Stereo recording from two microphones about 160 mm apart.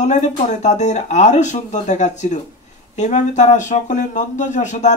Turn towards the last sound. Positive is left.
turn(degrees=45)  # may be behind; listen again after turning